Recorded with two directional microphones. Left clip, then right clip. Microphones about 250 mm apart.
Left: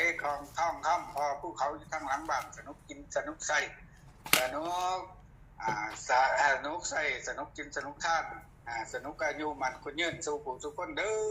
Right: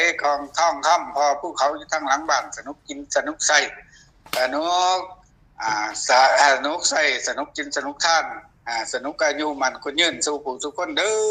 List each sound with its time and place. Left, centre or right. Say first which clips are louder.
0.0 s speech: right 11 dB; right